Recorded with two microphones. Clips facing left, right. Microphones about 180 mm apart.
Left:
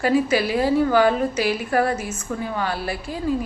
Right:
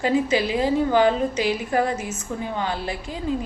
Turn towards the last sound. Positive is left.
turn(degrees=-20)  # may be behind; listen again after turning